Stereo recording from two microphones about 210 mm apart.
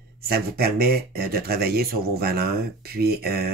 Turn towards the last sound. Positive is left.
turn(degrees=-50)  # may be behind; listen again after turning